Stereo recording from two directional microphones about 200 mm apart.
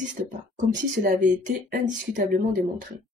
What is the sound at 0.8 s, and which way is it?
Speech, 40° right (ahead or behind).